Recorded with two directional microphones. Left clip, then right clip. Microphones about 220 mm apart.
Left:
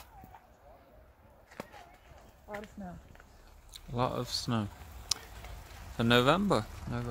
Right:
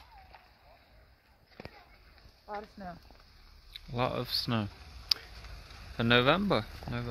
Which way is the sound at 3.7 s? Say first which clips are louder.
Even; centre (ahead or behind).